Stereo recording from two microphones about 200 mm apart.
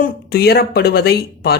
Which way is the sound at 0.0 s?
50° left (ahead or behind).